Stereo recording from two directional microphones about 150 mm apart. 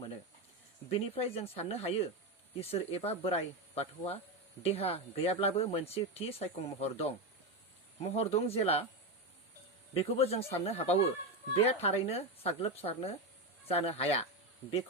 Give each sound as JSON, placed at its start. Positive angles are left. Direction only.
{"t": 0.9, "sound": "speech", "side_deg": 40}
{"t": 9.9, "sound": "speech", "side_deg": 40}